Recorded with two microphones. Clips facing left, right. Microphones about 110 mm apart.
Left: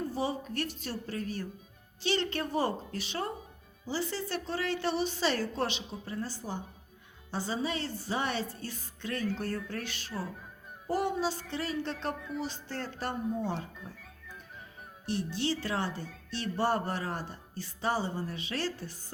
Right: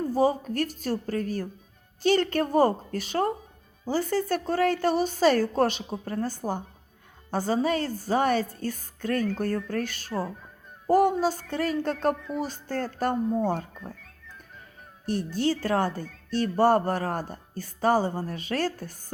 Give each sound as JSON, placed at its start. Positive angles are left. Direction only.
{"t": 0.1, "sound": "a woman's voice", "side_deg": -45}
{"t": 15.0, "sound": "a woman's voice", "side_deg": -45}